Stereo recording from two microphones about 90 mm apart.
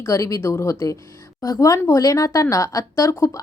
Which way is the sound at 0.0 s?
35° left (ahead or behind).